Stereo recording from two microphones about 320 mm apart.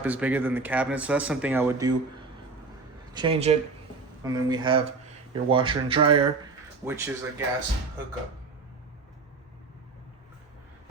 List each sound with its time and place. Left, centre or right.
0.0 s speech: centre
3.1 s speech: centre